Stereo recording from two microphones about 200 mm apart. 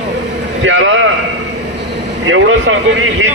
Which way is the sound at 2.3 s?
80° right.